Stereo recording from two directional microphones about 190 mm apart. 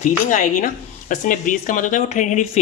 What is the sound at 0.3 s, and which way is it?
Speech, 45° left (ahead or behind).